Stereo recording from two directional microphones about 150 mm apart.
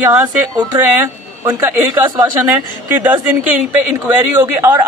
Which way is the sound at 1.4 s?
15° right (ahead or behind).